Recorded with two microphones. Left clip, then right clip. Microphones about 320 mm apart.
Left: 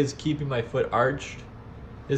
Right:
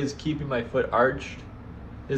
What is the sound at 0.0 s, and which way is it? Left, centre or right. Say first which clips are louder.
A man's voice: left 3 dB; left.